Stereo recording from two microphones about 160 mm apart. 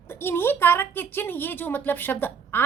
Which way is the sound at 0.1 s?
15° left (ahead or behind).